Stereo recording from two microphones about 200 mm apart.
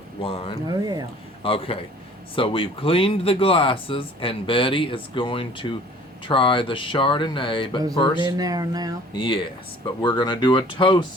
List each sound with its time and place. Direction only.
0.2 s speech: 30° left (ahead or behind)
0.7 s speech: 20° right (ahead or behind)
1.4 s a man's voice: 25° left (ahead or behind)
8.3 s speech: 20° right (ahead or behind)
9.1 s speech: 25° left (ahead or behind)